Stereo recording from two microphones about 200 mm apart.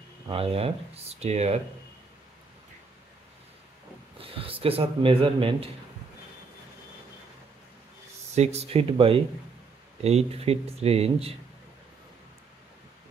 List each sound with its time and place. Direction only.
0.3 s speech: 30° right (ahead or behind)
4.2 s speech: 30° right (ahead or behind)
8.4 s speech: 30° right (ahead or behind)